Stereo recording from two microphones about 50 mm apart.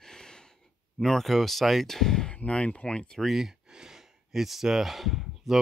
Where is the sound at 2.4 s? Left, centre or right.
Left.